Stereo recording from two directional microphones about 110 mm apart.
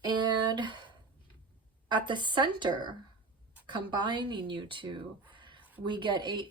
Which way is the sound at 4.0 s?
45° right (ahead or behind).